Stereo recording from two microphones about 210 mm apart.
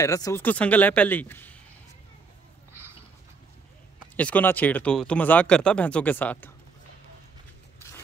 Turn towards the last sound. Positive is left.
turn(degrees=10)  # may be behind; listen again after turning